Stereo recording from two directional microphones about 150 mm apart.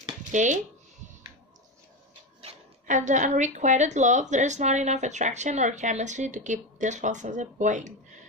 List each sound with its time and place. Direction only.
0.3 s speech: 55° right (ahead or behind)
2.9 s a woman's voice: 55° right (ahead or behind)